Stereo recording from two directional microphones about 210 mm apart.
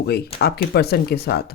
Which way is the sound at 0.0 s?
50° left (ahead or behind).